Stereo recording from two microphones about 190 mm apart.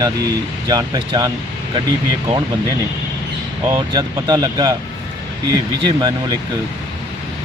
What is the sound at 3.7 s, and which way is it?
Speech, 20° right (ahead or behind).